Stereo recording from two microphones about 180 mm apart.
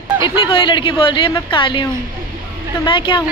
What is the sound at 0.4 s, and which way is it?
A woman's voice, 30° left (ahead or behind).